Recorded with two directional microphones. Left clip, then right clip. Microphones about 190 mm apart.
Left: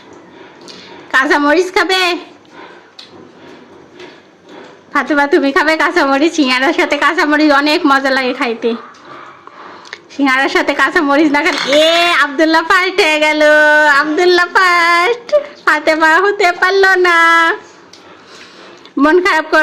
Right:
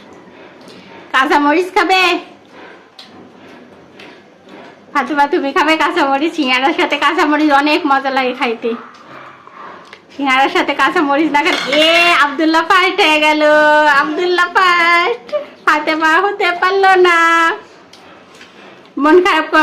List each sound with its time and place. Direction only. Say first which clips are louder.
1.1 s a woman's voice: left 1 dB; 25° left (ahead or behind)
4.9 s a woman's voice: left 2 dB; 25° left (ahead or behind)
9.9 s a woman's voice: left 1 dB; 25° left (ahead or behind)
18.9 s a woman's voice: even; 25° left (ahead or behind)